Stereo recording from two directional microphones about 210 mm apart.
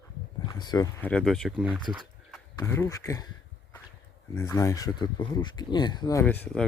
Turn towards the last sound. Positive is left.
turn(degrees=5)  # may be behind; listen again after turning